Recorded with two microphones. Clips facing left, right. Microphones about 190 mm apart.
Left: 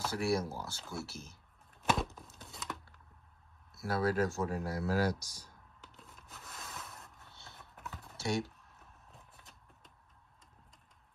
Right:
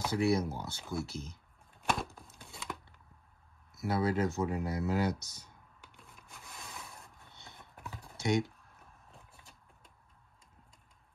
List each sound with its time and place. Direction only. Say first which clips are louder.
0.0 s speech: right 3 dB; 20° right (ahead or behind)
0.7 s speech: right 5 dB; centre (ahead or behind)
1.0 s speech: right 5 dB; 15° right (ahead or behind)
1.8 s a sound: left 2 dB; centre (ahead or behind)
3.7 s speech: right 1 dB; 20° right (ahead or behind)
5.9 s a sound: even; centre (ahead or behind)
7.2 s a sound: right 1 dB; 15° right (ahead or behind)
7.7 s computer keyboard: right 1 dB; centre (ahead or behind)
8.2 s speech: right 4 dB; 15° right (ahead or behind)
9.1 s vehicle: right 1 dB; centre (ahead or behind)